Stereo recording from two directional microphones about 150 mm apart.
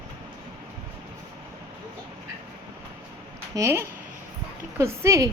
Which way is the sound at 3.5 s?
20° right (ahead or behind).